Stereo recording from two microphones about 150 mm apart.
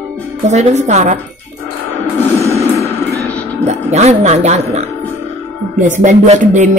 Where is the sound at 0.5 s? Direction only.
50° right (ahead or behind).